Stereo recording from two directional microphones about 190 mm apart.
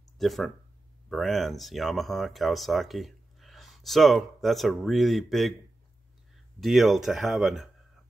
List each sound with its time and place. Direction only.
0.2 s speech: centre (ahead or behind)
6.6 s speech: centre (ahead or behind)